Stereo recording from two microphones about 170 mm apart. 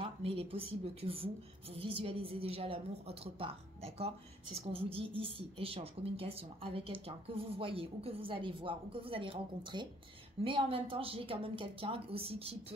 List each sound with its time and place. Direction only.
0.0 s a woman's voice: 35° right (ahead or behind)